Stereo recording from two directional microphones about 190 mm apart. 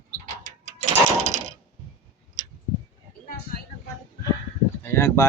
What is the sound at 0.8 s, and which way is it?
Sewing machine, 35° right (ahead or behind).